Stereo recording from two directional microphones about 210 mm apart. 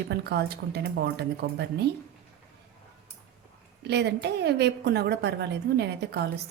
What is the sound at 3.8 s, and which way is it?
Speech, 55° right (ahead or behind).